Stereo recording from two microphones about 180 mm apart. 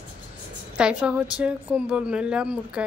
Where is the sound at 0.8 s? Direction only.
5° right (ahead or behind).